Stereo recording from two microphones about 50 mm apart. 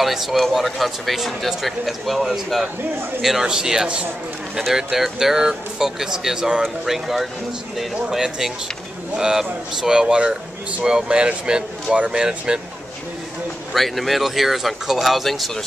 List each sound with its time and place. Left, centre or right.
0.0 s speech: centre
13.7 s speech: centre